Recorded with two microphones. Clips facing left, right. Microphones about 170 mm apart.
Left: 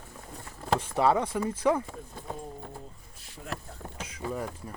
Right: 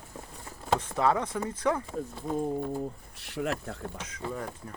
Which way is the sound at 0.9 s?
10° left (ahead or behind).